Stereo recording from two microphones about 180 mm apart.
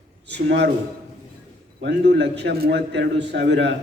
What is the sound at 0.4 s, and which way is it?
Speech, 75° right (ahead or behind).